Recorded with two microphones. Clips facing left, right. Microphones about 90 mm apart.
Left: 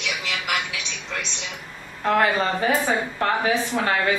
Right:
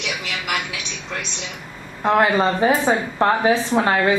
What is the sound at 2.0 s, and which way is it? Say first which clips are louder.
Speech: right 4 dB; 20° right (ahead or behind).